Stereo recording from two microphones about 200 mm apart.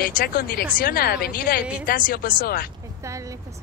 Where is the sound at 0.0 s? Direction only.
45° left (ahead or behind).